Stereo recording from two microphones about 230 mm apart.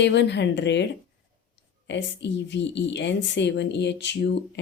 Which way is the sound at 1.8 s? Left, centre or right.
Left.